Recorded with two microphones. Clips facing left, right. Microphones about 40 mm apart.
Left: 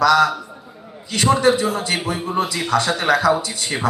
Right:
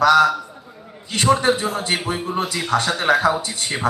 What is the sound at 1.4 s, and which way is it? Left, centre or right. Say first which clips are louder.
Speech: left 3 dB; right.